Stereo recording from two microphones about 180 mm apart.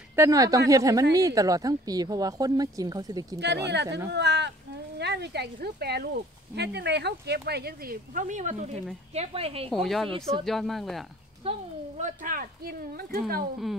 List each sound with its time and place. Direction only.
0.1 s speech: 15° right (ahead or behind)
3.3 s speech: 70° right (ahead or behind); by 9.7 s 35° right (ahead or behind)
9.7 s speech: centre (ahead or behind)
10.1 s speech: 30° right (ahead or behind)
10.4 s speech: centre (ahead or behind)
11.4 s speech: 30° right (ahead or behind)
12.0 s speech: 50° right (ahead or behind)